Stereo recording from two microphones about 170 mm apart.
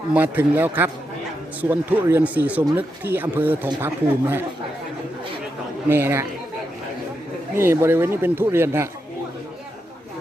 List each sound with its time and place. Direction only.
0.1 s speech: 10° right (ahead or behind)
5.9 s speech: 15° right (ahead or behind)
7.5 s speech: 15° right (ahead or behind)